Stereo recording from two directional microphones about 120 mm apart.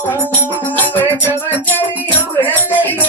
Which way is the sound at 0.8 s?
15° left (ahead or behind).